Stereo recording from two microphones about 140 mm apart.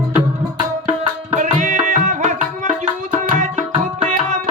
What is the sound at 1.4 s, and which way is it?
Music, 60° right (ahead or behind).